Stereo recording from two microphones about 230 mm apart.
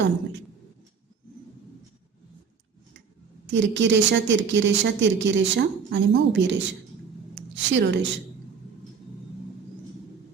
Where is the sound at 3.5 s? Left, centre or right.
Right.